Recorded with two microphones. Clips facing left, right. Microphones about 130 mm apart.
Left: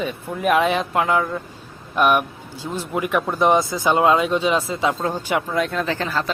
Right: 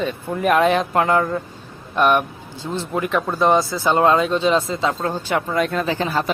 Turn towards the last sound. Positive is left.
turn(degrees=-15)  # may be behind; listen again after turning